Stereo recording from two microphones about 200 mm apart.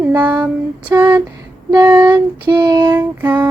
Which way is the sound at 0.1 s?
10° right (ahead or behind).